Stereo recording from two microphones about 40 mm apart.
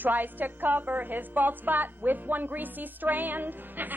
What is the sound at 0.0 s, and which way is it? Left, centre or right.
A woman's voice, right.